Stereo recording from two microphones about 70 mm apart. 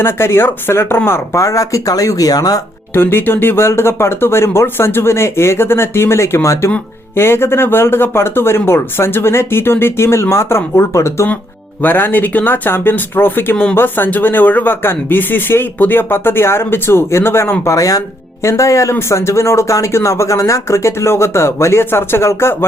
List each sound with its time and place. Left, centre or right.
0.0 s speech: left
2.9 s speech: left
11.8 s speech: left
17.7 s speech: left